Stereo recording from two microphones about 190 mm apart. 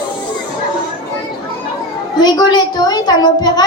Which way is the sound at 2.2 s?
20° left (ahead or behind).